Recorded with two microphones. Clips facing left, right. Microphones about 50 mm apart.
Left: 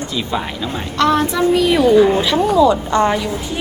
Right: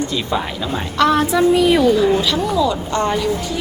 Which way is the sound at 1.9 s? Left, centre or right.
Left.